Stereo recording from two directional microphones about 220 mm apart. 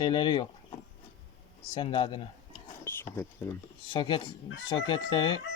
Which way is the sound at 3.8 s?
20° left (ahead or behind).